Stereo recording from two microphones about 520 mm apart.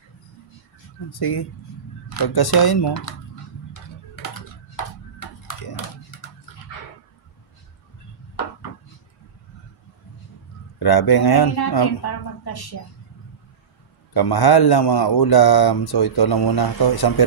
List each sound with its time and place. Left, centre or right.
1.1 s speech: left
10.8 s speech: left
14.1 s speech: left